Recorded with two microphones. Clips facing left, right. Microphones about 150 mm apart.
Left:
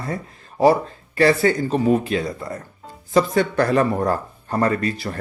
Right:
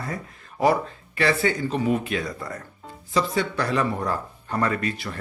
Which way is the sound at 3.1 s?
50° left (ahead or behind).